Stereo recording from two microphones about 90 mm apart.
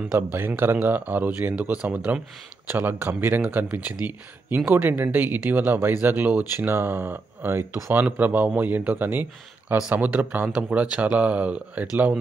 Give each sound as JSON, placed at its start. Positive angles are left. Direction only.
{"t": 0.1, "sound": "speech", "side_deg": -20}